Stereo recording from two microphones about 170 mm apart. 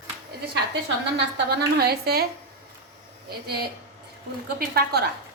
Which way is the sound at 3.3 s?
65° right (ahead or behind).